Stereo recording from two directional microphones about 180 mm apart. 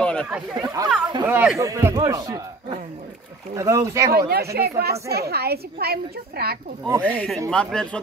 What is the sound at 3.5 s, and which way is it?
Speech, 15° right (ahead or behind).